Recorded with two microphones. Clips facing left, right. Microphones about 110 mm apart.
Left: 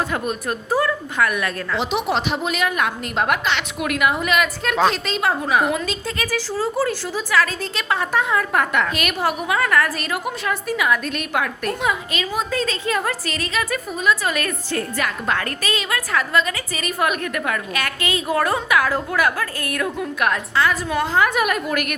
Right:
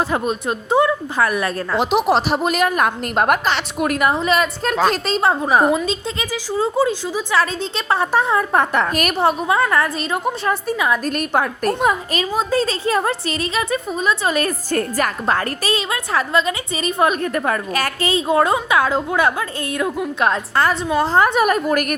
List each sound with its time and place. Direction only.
0.0 s a woman's voice: 30° right (ahead or behind)
1.7 s a woman's voice: 45° right (ahead or behind); by 7.3 s 20° right (ahead or behind)
7.3 s a woman's voice: 30° right (ahead or behind)
9.1 s a woman's voice: 30° right (ahead or behind)
11.0 s a woman's voice: 40° right (ahead or behind)
14.8 s a woman's voice: 40° right (ahead or behind)